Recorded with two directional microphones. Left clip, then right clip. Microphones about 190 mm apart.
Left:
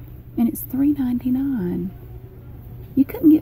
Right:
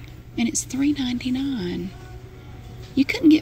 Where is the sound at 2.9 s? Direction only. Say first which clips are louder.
Left 1 dB; 10° left (ahead or behind).